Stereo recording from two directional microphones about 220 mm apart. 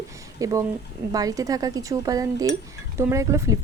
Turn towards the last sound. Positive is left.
turn(degrees=-15)  # may be behind; listen again after turning